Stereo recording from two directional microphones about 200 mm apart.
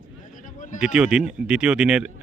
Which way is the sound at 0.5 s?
40° left (ahead or behind).